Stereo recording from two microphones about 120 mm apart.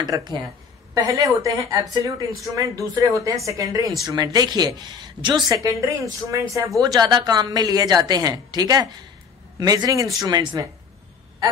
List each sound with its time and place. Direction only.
0.0 s a woman's voice: 35° right (ahead or behind)